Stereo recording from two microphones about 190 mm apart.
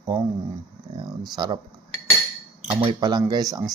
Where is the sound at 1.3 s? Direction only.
25° right (ahead or behind).